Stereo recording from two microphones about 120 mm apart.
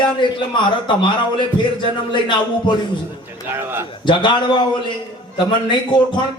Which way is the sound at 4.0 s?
40° left (ahead or behind).